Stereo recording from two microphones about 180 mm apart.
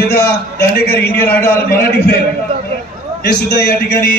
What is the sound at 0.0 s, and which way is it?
A man's voice, 65° left (ahead or behind).